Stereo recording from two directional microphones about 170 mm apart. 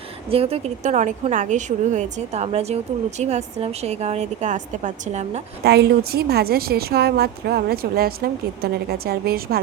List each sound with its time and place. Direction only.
0.3 s a woman's voice: 35° right (ahead or behind)
5.6 s a woman's voice: 75° right (ahead or behind)